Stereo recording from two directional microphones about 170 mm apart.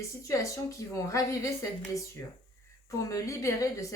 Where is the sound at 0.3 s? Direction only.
20° left (ahead or behind).